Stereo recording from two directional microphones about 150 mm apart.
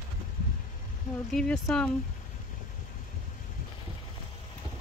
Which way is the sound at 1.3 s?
5° left (ahead or behind).